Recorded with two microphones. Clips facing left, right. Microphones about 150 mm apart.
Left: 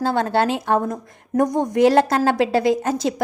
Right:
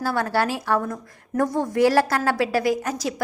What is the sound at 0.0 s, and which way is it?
A woman's voice, 25° left (ahead or behind).